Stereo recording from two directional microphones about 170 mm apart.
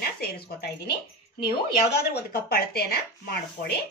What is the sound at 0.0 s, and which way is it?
Speech, 65° left (ahead or behind).